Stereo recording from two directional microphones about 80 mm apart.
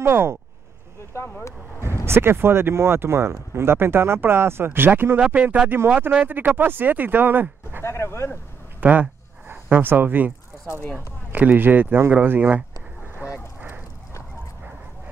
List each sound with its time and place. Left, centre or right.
0.0 s speech: right
1.1 s vehicle: left
2.0 s speech: right
7.8 s speech: left
8.8 s speech: right
11.3 s speech: right
13.1 s honk: right